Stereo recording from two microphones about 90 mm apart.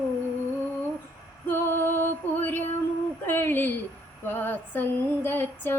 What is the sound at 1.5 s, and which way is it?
Music, 25° left (ahead or behind).